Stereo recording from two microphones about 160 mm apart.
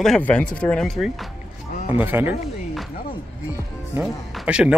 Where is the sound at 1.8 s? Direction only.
10° right (ahead or behind).